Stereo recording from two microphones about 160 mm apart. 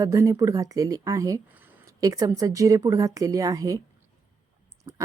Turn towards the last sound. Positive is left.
turn(degrees=-20)  # may be behind; listen again after turning